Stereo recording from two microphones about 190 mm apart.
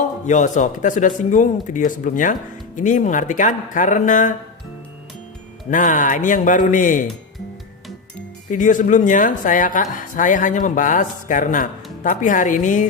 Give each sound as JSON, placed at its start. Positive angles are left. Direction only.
{"t": 0.0, "sound": "speech", "side_deg": 40}
{"t": 5.7, "sound": "speech", "side_deg": 45}
{"t": 8.4, "sound": "speech", "side_deg": 40}